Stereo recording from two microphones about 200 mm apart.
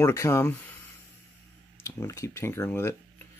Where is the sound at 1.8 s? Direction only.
15° left (ahead or behind).